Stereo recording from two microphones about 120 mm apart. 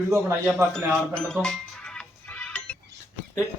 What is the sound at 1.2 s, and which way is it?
Music, 5° left (ahead or behind).